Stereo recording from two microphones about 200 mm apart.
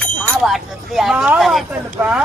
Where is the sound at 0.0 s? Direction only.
Centre (ahead or behind).